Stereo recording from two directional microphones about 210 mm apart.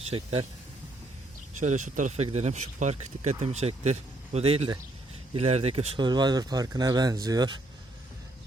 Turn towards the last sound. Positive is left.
turn(degrees=-20)  # may be behind; listen again after turning